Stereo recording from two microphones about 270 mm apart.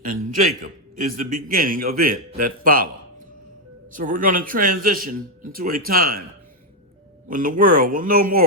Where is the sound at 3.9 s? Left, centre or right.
Right.